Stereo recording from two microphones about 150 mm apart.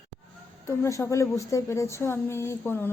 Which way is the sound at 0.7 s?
20° left (ahead or behind).